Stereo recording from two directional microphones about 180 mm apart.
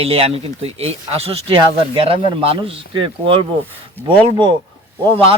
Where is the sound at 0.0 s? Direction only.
35° right (ahead or behind).